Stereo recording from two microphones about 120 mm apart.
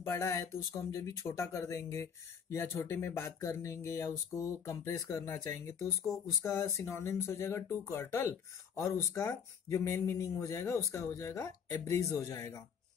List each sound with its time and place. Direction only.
0.0 s speech: 25° left (ahead or behind)